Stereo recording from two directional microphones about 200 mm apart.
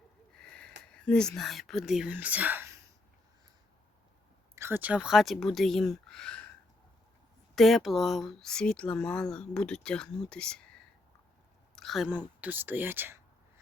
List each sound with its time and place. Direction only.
0.3 s a sound: 5° left (ahead or behind)
0.9 s speech: 5° left (ahead or behind); by 2.8 s 10° right (ahead or behind)
4.5 s speech: 10° right (ahead or behind); by 6.5 s 5° left (ahead or behind)
7.5 s speech: centre (ahead or behind)
11.8 s speech: centre (ahead or behind)